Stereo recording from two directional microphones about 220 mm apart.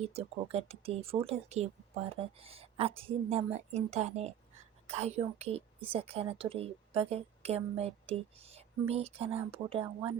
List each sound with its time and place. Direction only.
0.0 s a woman's voice: 30° right (ahead or behind)